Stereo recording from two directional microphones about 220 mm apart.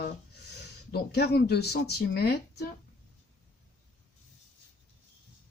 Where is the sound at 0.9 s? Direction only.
45° left (ahead or behind).